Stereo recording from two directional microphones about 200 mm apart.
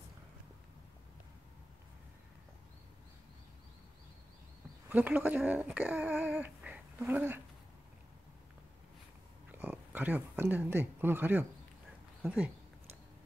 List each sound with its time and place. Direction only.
4.8 s speech: 10° right (ahead or behind)
9.5 s speech: 10° right (ahead or behind)